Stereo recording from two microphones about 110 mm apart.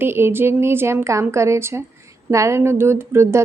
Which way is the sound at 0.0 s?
20° right (ahead or behind).